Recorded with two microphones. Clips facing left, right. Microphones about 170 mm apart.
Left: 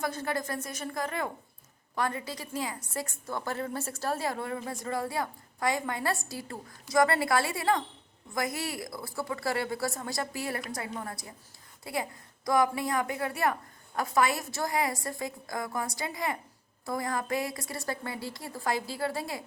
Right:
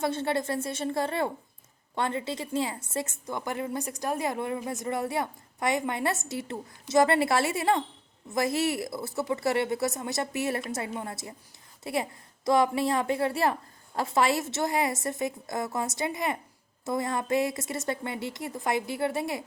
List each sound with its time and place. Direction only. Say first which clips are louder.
0.0 s a woman's voice: right 4 dB; 25° right (ahead or behind)